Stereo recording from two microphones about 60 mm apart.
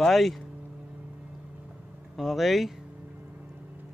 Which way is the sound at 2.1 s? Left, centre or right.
Centre.